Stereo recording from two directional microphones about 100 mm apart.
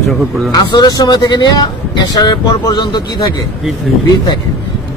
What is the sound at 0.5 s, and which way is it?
Speech, 45° left (ahead or behind).